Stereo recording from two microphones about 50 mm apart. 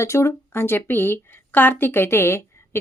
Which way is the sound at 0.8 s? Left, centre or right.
Left.